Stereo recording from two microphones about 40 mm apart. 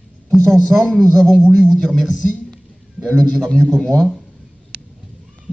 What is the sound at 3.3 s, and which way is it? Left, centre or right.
Speech, centre.